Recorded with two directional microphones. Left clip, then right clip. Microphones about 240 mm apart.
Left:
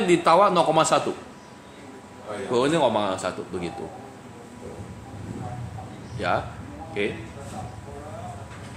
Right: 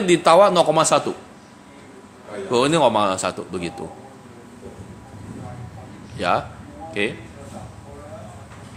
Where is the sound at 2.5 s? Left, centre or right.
Right.